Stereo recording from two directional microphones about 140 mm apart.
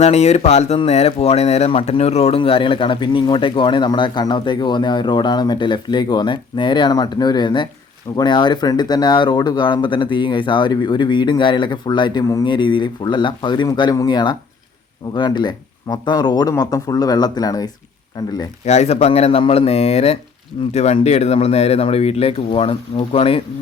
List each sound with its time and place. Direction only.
0.0 s speech: 50° left (ahead or behind); by 18.3 s 25° left (ahead or behind)
18.6 s speech: 55° left (ahead or behind)